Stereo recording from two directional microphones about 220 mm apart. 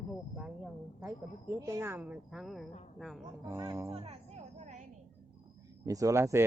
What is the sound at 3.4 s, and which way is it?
Speech, 10° right (ahead or behind).